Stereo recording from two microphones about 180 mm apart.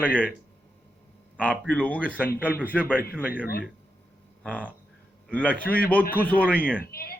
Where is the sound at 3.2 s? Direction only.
10° right (ahead or behind).